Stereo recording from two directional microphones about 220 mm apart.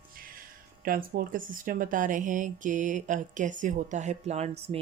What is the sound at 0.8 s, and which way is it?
Speech, 40° right (ahead or behind).